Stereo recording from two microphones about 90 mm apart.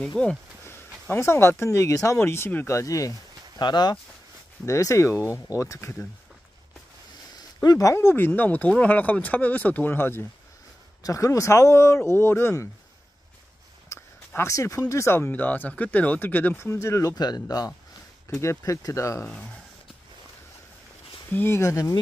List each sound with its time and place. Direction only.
0.0 s speech: 10° left (ahead or behind)
0.7 s speech: 25° left (ahead or behind)
3.6 s speech: 55° left (ahead or behind)
4.6 s speech: 35° left (ahead or behind)
7.3 s speech: 45° left (ahead or behind); by 10.2 s 25° left (ahead or behind)
11.0 s speech: 35° left (ahead or behind)
13.8 s speech: 30° left (ahead or behind)
17.1 s speech: 50° left (ahead or behind)
18.3 s speech: 30° left (ahead or behind)
21.3 s speech: 25° left (ahead or behind)